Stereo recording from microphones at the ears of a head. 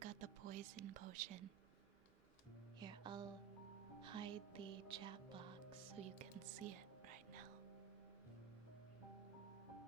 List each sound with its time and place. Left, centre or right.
0.0 s whispering: right
2.8 s music: right
6.0 s speech: right